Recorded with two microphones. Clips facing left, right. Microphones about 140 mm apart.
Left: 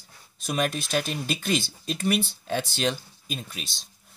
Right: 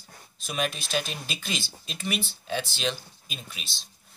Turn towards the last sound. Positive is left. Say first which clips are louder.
# left 7 dB
turn(degrees=50)  # may be behind; listen again after turning